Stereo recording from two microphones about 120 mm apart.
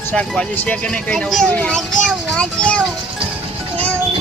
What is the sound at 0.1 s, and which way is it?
Speech, 10° left (ahead or behind).